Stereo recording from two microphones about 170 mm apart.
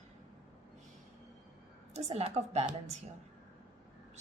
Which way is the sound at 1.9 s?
40° right (ahead or behind).